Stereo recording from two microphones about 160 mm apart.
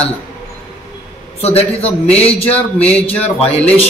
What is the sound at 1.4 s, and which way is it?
Speech, 40° left (ahead or behind).